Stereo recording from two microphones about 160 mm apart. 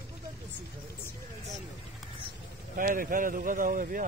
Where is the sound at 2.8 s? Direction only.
60° right (ahead or behind).